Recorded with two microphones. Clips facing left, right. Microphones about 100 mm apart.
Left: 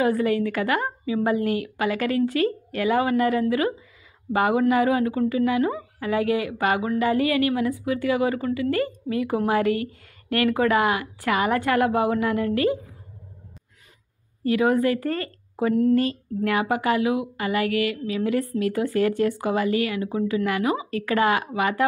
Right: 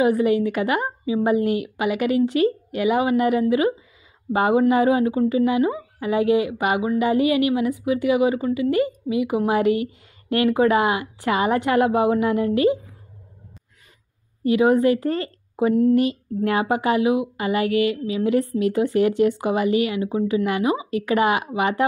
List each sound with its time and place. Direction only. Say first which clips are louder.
0.0 s speech: right 3 dB; 20° right (ahead or behind)
14.4 s speech: right 3 dB; 20° right (ahead or behind)